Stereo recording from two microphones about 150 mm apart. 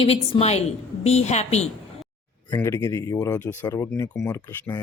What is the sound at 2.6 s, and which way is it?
Speech, 20° left (ahead or behind).